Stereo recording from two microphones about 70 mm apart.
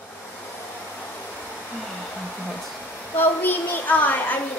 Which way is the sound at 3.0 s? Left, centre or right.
Left.